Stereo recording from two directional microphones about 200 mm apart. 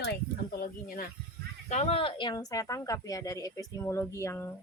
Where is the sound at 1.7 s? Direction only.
35° left (ahead or behind); by 4.5 s 10° left (ahead or behind).